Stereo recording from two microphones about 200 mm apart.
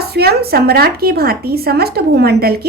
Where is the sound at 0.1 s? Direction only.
50° right (ahead or behind).